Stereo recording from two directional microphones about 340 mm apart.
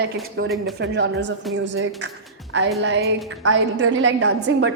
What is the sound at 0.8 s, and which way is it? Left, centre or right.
A woman's voice, right.